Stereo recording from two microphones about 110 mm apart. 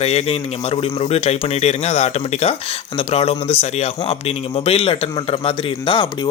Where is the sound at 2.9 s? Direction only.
60° left (ahead or behind).